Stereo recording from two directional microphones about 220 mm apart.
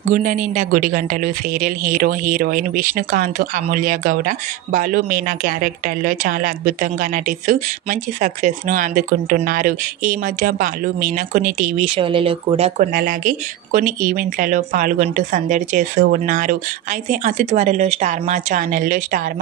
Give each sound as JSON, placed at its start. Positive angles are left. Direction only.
{"t": 0.1, "sound": "speech", "side_deg": -35}
{"t": 12.9, "sound": "speech", "side_deg": -40}